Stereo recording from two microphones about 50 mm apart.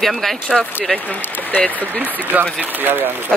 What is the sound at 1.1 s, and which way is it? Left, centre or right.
Speech, left.